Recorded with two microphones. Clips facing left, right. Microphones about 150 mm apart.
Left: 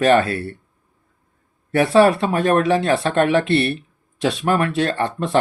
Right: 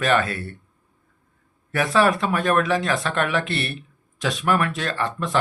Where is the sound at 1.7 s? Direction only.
35° left (ahead or behind).